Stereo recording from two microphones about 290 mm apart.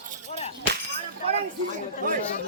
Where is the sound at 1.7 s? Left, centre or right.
Right.